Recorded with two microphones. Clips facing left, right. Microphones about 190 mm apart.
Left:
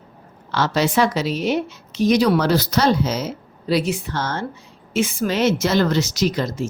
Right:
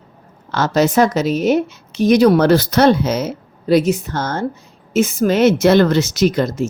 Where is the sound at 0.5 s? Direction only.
45° right (ahead or behind).